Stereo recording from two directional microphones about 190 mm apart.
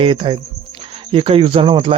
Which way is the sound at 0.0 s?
25° right (ahead or behind).